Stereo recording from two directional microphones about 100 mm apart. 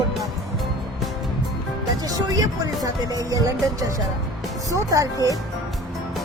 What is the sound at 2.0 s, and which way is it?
Speech, 40° right (ahead or behind).